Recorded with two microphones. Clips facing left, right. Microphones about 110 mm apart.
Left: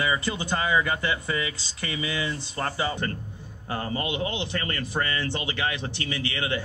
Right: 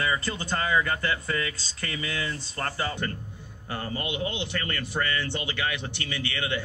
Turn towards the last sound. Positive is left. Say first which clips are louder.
# left 2 dB
turn(degrees=30)  # may be behind; listen again after turning